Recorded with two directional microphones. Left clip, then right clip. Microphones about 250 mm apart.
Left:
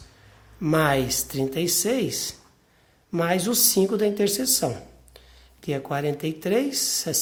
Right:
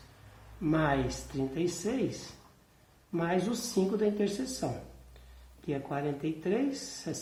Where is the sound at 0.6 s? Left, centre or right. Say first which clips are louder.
Left 8 dB; left.